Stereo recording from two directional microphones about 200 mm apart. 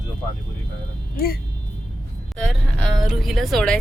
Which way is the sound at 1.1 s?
50° left (ahead or behind).